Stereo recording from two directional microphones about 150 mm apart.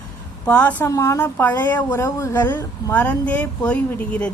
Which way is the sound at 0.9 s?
20° left (ahead or behind).